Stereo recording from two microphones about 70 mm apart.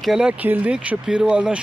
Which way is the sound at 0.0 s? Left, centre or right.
Centre.